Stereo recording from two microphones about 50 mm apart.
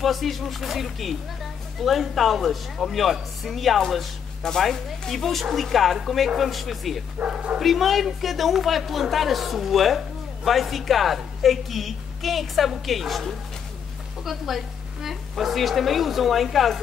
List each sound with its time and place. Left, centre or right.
0.0 s a woman's voice: centre
7.2 s speech: right
7.5 s a woman's voice: centre